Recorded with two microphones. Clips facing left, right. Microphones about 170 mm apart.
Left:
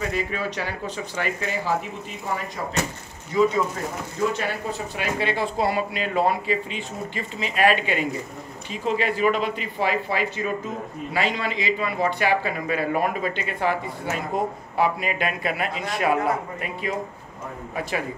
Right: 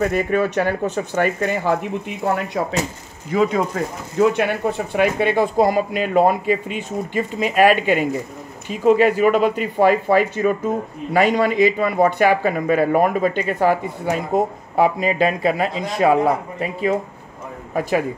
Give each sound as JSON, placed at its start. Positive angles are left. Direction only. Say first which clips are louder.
{"t": 0.0, "sound": "speech", "louder": "right 8 dB", "side_deg": -55}
{"t": 3.3, "sound": "speech", "louder": "right 2 dB", "side_deg": -85}
{"t": 15.0, "sound": "a man's voice", "louder": "right 8 dB", "side_deg": -30}
{"t": 17.7, "sound": "speech", "louder": "right 8 dB", "side_deg": -45}